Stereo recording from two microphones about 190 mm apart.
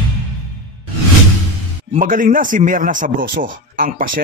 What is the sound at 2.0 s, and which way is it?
Speech, 45° right (ahead or behind).